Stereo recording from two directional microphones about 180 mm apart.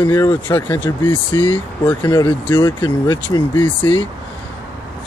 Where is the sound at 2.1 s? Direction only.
25° left (ahead or behind).